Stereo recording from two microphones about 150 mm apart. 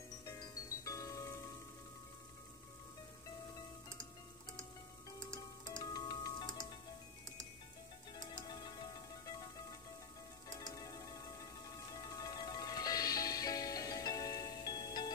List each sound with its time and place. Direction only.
0.2 s music: 25° left (ahead or behind)
5.7 s music: 30° left (ahead or behind)
8.1 s music: 30° left (ahead or behind)
10.7 s music: 25° left (ahead or behind)